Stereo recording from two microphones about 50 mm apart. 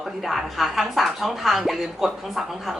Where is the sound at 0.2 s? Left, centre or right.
Centre.